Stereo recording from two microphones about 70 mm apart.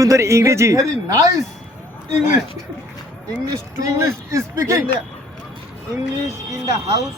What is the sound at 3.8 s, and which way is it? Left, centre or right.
Speech, right.